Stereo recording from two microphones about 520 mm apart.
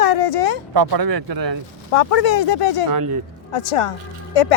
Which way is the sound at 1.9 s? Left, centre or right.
Left.